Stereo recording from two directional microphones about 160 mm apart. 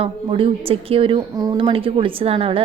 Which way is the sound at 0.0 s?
35° right (ahead or behind).